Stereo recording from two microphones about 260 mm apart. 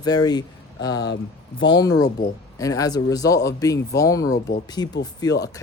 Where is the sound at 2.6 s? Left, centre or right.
Centre.